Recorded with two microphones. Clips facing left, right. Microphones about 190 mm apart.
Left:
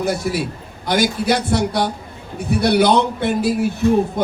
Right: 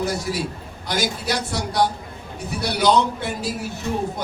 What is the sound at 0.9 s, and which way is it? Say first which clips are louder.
Speech: left 7 dB; 60° left (ahead or behind).